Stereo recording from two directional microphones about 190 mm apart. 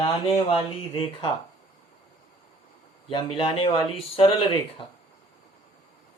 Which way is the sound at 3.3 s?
25° left (ahead or behind).